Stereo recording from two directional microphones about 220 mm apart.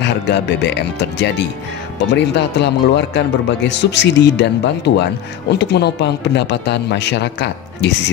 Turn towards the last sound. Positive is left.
turn(degrees=50)  # may be behind; listen again after turning